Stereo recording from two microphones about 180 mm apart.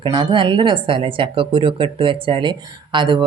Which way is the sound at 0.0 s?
25° right (ahead or behind).